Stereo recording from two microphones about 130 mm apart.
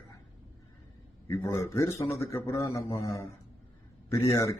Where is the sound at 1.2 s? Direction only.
20° left (ahead or behind).